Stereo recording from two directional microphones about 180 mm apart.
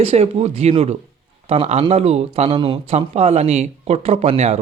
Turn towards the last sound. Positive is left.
turn(degrees=-35)  # may be behind; listen again after turning